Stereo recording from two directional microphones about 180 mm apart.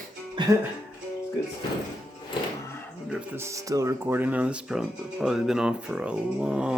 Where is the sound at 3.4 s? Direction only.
15° right (ahead or behind).